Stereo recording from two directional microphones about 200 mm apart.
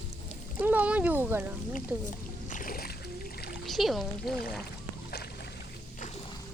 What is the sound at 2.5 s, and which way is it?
Splash, 45° left (ahead or behind).